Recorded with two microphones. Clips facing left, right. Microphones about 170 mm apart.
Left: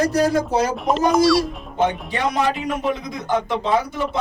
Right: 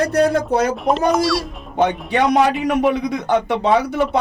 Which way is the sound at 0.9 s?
Centre (ahead or behind).